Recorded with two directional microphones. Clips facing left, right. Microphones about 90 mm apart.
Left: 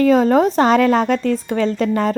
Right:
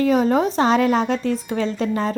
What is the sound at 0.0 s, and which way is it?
A woman's voice, 55° left (ahead or behind).